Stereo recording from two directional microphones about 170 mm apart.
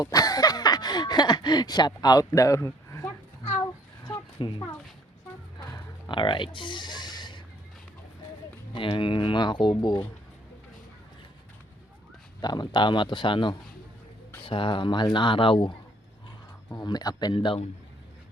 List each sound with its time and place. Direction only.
0.0 s a sound: 20° left (ahead or behind)
8.7 s speech: 30° left (ahead or behind)
12.4 s speech: 25° left (ahead or behind)